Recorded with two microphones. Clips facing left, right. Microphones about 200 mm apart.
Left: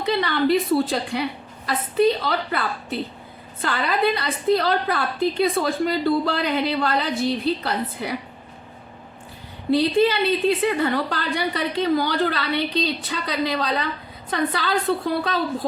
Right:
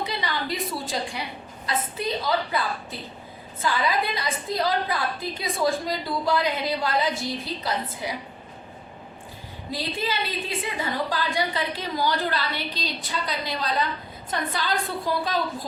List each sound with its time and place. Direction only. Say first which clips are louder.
0.0 s a woman's voice: left 9 dB; 65° left (ahead or behind)
9.7 s a woman's voice: left 11 dB; 65° left (ahead or behind)